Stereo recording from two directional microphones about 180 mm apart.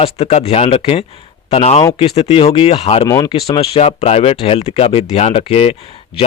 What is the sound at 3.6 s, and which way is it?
Speech, 35° left (ahead or behind).